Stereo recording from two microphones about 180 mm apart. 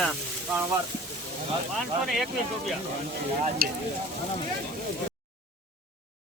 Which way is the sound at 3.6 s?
55° right (ahead or behind).